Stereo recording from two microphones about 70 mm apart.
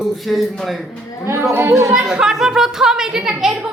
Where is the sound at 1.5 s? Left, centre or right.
Right.